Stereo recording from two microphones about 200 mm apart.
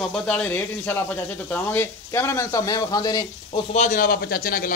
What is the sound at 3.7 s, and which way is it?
A man's voice, 40° left (ahead or behind).